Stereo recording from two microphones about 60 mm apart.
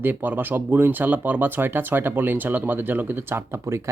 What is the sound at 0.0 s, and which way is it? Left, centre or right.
Speech, right.